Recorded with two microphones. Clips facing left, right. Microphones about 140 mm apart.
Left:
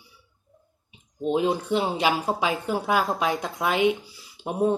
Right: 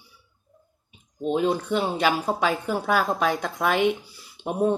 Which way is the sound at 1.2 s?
10° left (ahead or behind).